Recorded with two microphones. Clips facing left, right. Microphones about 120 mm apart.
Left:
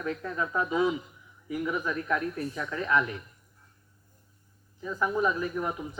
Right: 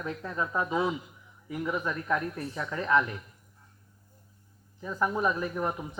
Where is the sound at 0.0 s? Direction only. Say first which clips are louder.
Left 1 dB; 30° right (ahead or behind).